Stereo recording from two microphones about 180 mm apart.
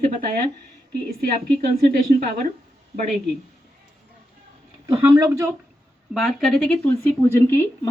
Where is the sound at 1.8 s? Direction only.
50° right (ahead or behind).